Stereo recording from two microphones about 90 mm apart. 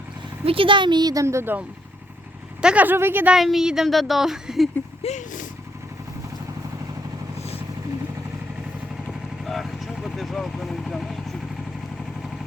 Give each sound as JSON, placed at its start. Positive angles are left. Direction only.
{"t": 0.4, "sound": "speech", "side_deg": -85}
{"t": 1.2, "sound": "speech", "side_deg": -30}
{"t": 2.6, "sound": "a woman's voice", "side_deg": -15}
{"t": 3.3, "sound": "speech", "side_deg": -5}
{"t": 9.0, "sound": "vehicle", "side_deg": 0}